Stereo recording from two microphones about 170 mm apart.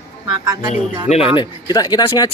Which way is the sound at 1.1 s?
40° left (ahead or behind).